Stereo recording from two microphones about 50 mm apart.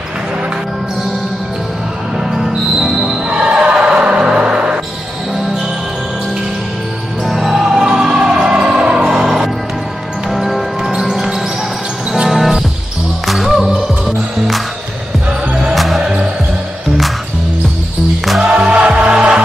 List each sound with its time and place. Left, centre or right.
2.1 s music: centre
3.3 s music: centre
7.2 s music: centre
15.7 s music: centre
16.0 s basketball bounce: centre
18.4 s music: right